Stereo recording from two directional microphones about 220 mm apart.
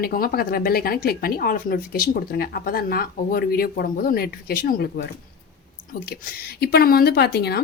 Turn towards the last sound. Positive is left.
turn(degrees=45)  # may be behind; listen again after turning